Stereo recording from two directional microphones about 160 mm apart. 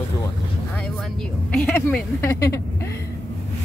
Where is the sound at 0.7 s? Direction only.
10° left (ahead or behind).